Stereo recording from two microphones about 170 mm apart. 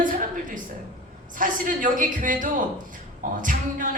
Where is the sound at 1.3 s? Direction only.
50° right (ahead or behind).